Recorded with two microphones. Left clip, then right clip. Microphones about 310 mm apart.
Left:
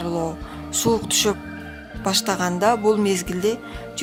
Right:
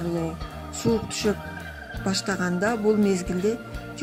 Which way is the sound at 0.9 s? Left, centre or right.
Left.